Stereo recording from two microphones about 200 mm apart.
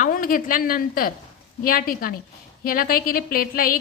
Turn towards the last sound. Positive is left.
turn(degrees=45)  # may be behind; listen again after turning